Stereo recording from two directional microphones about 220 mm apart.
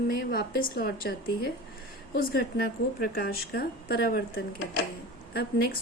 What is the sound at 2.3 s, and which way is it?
A woman's voice, 45° left (ahead or behind).